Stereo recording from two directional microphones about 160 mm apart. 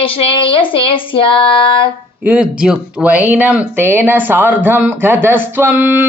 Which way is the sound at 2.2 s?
10° right (ahead or behind).